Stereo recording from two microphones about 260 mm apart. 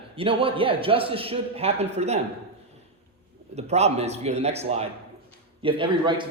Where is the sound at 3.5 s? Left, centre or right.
Right.